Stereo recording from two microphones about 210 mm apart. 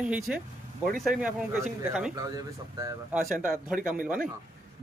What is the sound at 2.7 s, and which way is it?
Speech, 15° right (ahead or behind).